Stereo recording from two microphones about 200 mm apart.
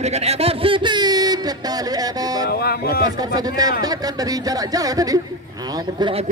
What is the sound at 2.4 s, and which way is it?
Speech, 50° left (ahead or behind).